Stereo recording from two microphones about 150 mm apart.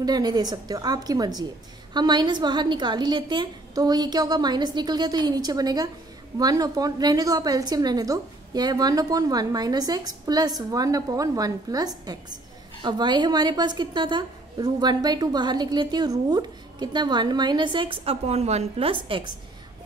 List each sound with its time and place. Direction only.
0.0 s a woman's voice: 25° right (ahead or behind)